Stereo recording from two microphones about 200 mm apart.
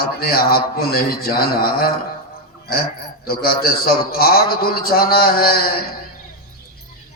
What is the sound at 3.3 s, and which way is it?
A man's voice, 50° left (ahead or behind).